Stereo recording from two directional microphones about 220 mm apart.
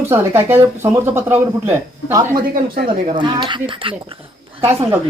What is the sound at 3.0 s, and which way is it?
Speech, 25° right (ahead or behind).